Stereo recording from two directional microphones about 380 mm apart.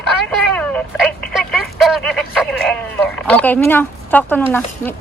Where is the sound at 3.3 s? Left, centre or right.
Centre.